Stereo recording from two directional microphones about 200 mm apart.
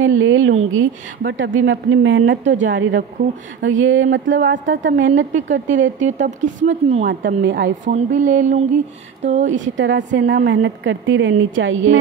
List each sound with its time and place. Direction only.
0.0 s a woman's voice: 75° right (ahead or behind)
2.4 s speech: 35° right (ahead or behind)
2.7 s a woman's voice: 70° right (ahead or behind)
5.3 s speech: 40° right (ahead or behind)
7.1 s a woman's voice: 60° right (ahead or behind)
7.8 s speech: 40° right (ahead or behind)
9.8 s a woman's voice: 65° right (ahead or behind)